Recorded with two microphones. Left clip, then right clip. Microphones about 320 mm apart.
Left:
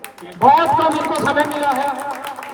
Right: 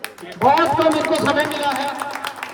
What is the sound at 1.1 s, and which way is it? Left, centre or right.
Speech, centre.